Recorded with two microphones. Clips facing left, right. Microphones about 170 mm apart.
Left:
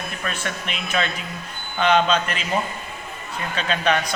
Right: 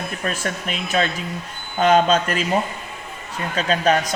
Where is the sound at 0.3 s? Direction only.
40° right (ahead or behind).